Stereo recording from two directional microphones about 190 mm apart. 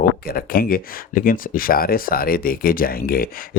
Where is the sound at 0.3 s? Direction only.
50° left (ahead or behind).